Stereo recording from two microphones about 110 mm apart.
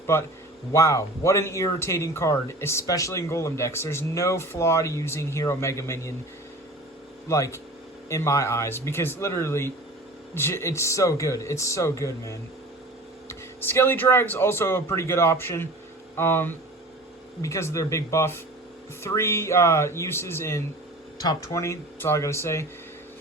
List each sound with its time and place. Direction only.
0.7 s speech: 30° left (ahead or behind)
7.3 s speech: 30° left (ahead or behind)
21.2 s speech: 40° left (ahead or behind)
21.5 s speech: 25° left (ahead or behind)